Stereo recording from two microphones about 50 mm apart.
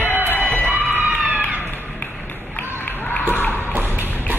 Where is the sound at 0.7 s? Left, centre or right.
Right.